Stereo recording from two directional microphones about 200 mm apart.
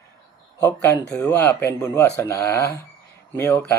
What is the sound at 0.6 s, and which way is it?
Speech, 15° left (ahead or behind).